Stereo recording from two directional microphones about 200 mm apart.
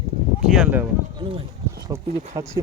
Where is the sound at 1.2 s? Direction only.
25° right (ahead or behind).